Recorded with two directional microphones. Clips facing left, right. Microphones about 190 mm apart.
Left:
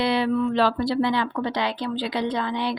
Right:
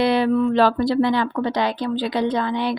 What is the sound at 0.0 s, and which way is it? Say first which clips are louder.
Speech: right 4 dB; 50° right (ahead or behind).